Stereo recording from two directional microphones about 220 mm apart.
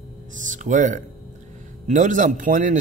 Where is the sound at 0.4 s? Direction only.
35° right (ahead or behind).